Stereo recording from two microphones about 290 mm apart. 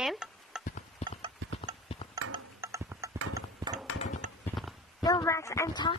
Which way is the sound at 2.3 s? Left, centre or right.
Centre.